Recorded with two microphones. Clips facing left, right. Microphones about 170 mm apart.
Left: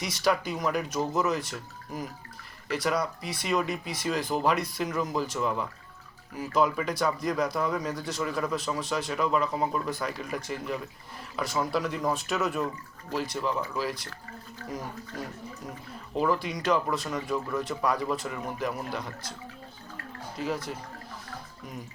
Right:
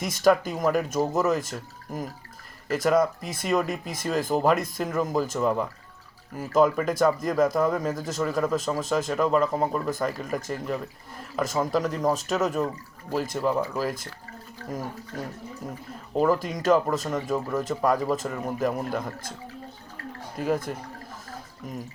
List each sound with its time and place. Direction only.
0.0 s speech: 45° right (ahead or behind)
16.1 s speech: 40° right (ahead or behind)
20.4 s speech: 50° right (ahead or behind)